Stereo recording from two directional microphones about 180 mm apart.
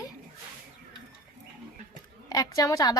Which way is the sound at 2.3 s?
20° left (ahead or behind).